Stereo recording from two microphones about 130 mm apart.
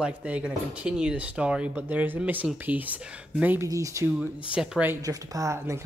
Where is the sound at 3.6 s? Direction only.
25° right (ahead or behind).